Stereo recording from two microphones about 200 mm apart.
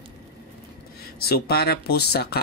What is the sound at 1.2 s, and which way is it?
Speech, 50° left (ahead or behind).